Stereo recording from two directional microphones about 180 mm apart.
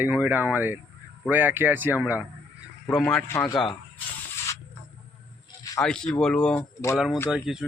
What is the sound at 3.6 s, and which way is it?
Snake, centre (ahead or behind).